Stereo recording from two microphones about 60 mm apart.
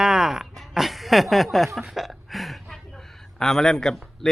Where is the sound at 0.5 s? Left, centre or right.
Centre.